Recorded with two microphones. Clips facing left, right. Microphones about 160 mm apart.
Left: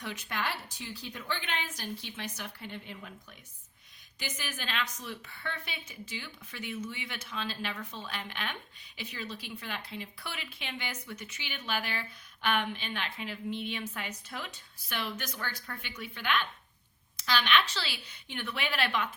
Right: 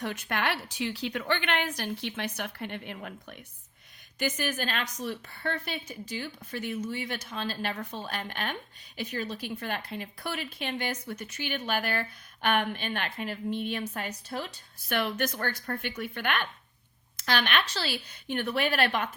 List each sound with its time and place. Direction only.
0.0 s a woman's voice: 55° right (ahead or behind)
4.2 s speech: 50° right (ahead or behind)
14.8 s a woman's voice: 55° right (ahead or behind)